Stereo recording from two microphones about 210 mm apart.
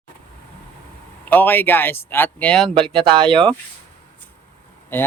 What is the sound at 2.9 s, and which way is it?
Speech, 25° right (ahead or behind).